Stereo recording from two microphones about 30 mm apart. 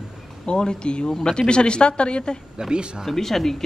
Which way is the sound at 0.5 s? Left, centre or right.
Left.